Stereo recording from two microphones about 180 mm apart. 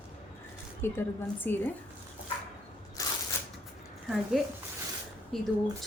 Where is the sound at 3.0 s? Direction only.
20° left (ahead or behind).